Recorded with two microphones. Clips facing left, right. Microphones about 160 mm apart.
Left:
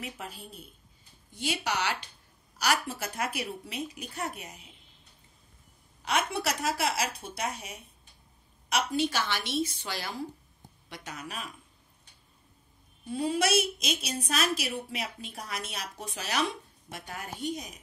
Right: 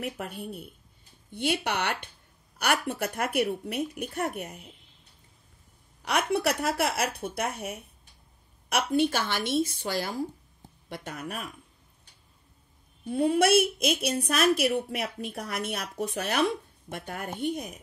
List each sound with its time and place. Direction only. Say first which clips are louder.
0.0 s a woman's voice: right 6 dB; 60° right (ahead or behind)
6.0 s a woman's voice: right 4 dB; 60° right (ahead or behind)
13.0 s a woman's voice: right 5 dB; 60° right (ahead or behind)